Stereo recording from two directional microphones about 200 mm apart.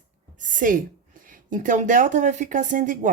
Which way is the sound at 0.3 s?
40° right (ahead or behind).